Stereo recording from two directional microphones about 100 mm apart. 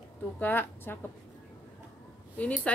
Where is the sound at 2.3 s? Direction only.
15° left (ahead or behind).